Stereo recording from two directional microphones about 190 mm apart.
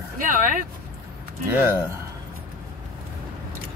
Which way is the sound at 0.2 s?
45° right (ahead or behind).